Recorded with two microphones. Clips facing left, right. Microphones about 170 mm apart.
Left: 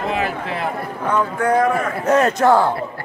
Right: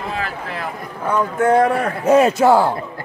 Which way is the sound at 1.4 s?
30° right (ahead or behind).